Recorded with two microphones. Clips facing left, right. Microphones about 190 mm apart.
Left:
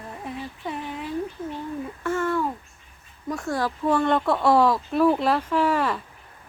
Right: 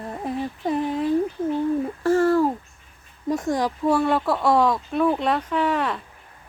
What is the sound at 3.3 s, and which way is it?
Speech, 20° right (ahead or behind).